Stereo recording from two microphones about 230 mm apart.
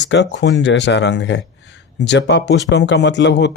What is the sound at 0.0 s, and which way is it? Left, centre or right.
Speech, left.